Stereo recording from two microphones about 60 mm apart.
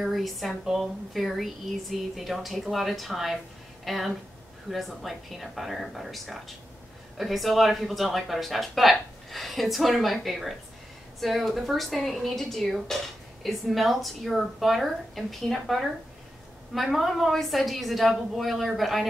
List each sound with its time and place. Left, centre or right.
0.0 s speech: centre